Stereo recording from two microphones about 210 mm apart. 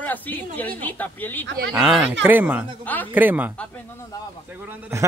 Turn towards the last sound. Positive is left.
turn(degrees=-15)  # may be behind; listen again after turning